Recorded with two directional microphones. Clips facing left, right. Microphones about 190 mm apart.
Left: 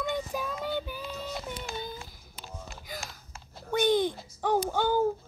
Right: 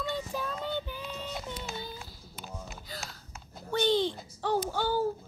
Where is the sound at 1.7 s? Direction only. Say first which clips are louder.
Left 3 dB; 15° left (ahead or behind).